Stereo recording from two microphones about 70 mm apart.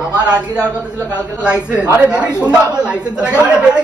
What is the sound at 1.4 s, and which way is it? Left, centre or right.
Speech, centre.